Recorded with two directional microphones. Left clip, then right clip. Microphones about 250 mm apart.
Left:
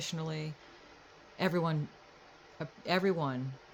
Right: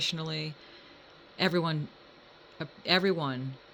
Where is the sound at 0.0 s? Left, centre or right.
Right.